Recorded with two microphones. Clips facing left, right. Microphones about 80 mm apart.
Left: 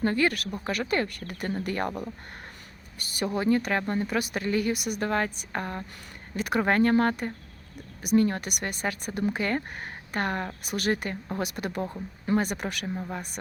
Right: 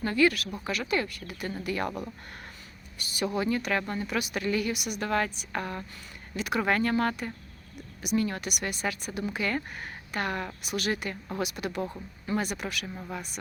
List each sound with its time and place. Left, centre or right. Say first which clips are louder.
0.0 s speech: even; left
3.3 s speech: left 4 dB; left